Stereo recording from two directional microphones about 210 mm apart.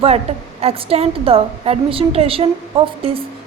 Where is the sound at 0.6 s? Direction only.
25° right (ahead or behind).